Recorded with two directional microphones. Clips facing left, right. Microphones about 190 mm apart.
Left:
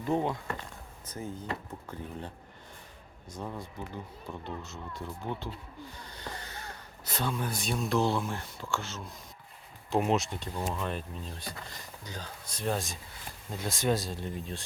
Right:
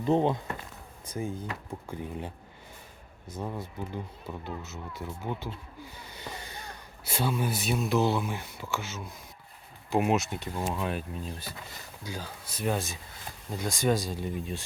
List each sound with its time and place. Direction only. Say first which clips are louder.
0.0 s speech: right 5 dB; 25° right (ahead or behind)
1.0 s speech: right 3 dB; 10° right (ahead or behind)